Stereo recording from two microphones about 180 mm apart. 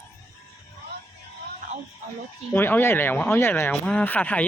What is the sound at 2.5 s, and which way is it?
Speech, 10° left (ahead or behind).